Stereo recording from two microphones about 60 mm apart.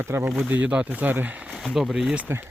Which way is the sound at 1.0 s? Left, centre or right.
Right.